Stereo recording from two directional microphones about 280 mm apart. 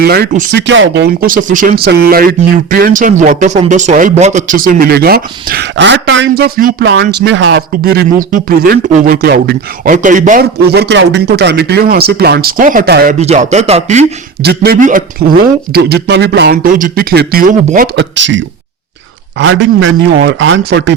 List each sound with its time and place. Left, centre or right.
0.0 s speech: right
7.7 s speech: right